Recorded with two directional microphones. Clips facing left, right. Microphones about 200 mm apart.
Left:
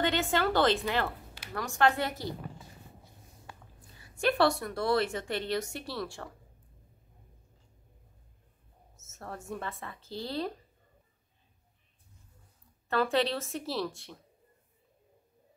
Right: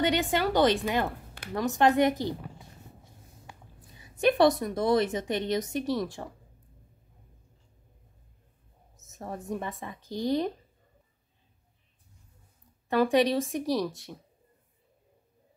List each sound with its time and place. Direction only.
0.0 s a woman's voice: 15° right (ahead or behind)
4.0 s a woman's voice: 20° right (ahead or behind)
9.0 s a woman's voice: 15° right (ahead or behind)
12.8 s a woman's voice: 15° right (ahead or behind)